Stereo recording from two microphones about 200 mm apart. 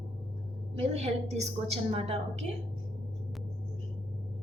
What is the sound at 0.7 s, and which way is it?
A woman's voice, 30° right (ahead or behind).